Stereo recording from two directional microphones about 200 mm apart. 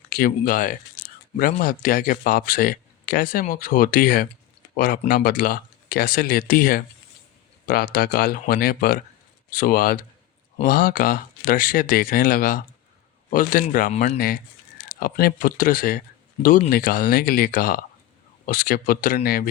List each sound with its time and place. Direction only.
0.1 s speech: 45° left (ahead or behind)
14.9 s speech: 45° left (ahead or behind)